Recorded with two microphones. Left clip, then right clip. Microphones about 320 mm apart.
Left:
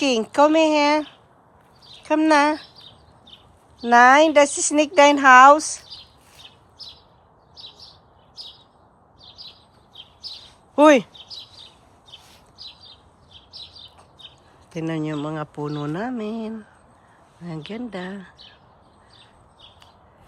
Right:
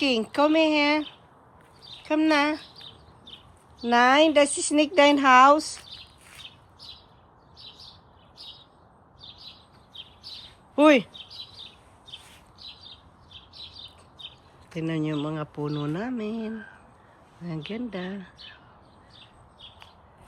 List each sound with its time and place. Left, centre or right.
0.0 s speech: centre
2.0 s speech: centre
3.8 s speech: centre
10.8 s speech: centre
14.7 s speech: centre